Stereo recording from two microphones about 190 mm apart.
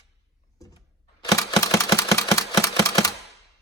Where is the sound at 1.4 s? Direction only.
15° left (ahead or behind).